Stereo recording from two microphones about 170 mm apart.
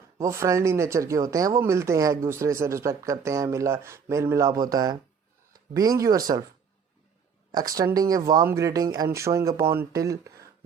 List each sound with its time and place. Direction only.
0.2 s speech: 15° right (ahead or behind)
7.5 s speech: 20° right (ahead or behind)